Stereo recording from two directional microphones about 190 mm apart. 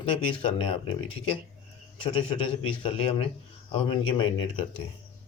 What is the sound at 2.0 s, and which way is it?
Speech, 25° left (ahead or behind).